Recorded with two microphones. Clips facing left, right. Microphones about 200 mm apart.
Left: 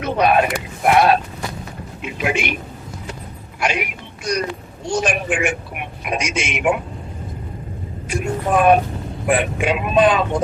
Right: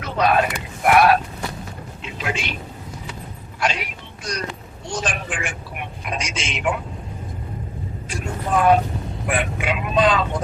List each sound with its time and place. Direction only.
0.0 s a sound: 20° left (ahead or behind)
0.9 s vehicle: 25° left (ahead or behind)
2.2 s speech: 15° left (ahead or behind)
3.6 s speech: 15° left (ahead or behind)
4.9 s speech: 10° left (ahead or behind)
8.1 s speech: 10° left (ahead or behind)